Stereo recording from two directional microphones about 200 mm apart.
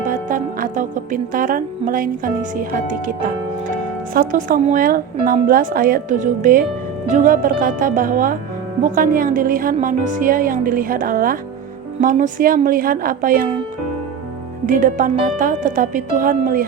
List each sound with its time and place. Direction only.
0.0 s speech: 40° right (ahead or behind)
14.7 s speech: 40° right (ahead or behind)